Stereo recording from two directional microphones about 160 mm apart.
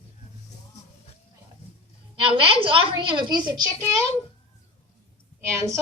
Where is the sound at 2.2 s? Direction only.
35° right (ahead or behind).